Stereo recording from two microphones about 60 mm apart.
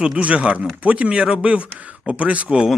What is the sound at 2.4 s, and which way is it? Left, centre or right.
Speech, centre.